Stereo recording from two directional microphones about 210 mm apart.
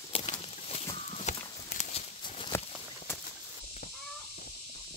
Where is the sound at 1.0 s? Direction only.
35° left (ahead or behind).